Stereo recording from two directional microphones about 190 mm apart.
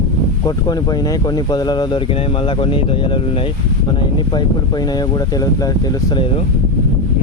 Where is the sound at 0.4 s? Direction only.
20° left (ahead or behind).